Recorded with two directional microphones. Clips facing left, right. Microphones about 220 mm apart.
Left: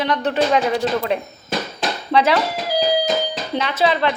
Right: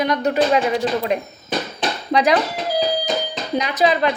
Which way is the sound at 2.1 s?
15° right (ahead or behind).